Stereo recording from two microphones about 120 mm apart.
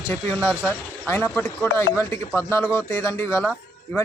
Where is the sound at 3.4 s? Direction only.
5° left (ahead or behind).